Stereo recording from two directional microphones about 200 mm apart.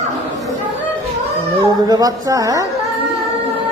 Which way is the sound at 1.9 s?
20° right (ahead or behind).